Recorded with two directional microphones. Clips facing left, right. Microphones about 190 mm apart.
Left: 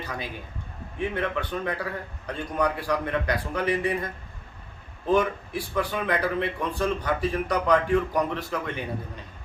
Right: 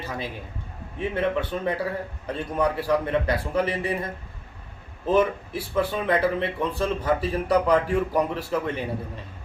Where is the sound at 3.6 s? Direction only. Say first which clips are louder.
Left 1 dB; 30° right (ahead or behind).